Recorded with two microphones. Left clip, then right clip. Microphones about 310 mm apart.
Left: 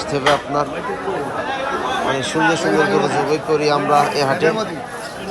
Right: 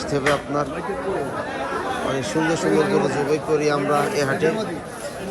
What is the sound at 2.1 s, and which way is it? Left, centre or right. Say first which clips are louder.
A man's voice: left 5 dB; centre.